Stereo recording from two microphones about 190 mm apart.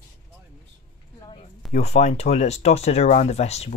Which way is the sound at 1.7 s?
35° left (ahead or behind).